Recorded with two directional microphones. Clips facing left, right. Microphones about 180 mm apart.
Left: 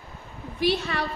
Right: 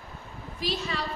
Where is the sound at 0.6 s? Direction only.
65° left (ahead or behind).